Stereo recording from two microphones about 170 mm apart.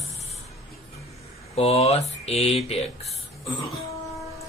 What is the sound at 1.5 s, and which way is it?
Speech, 35° left (ahead or behind).